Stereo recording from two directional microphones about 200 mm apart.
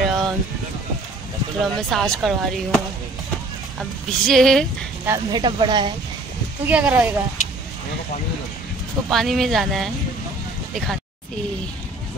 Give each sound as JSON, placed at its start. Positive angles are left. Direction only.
{"t": 0.0, "sound": "a sound", "side_deg": 0}
{"t": 1.6, "sound": "speech", "side_deg": 0}
{"t": 4.1, "sound": "speech", "side_deg": 0}
{"t": 5.0, "sound": "speech", "side_deg": -15}
{"t": 6.7, "sound": "speech", "side_deg": -10}
{"t": 9.1, "sound": "speech", "side_deg": 0}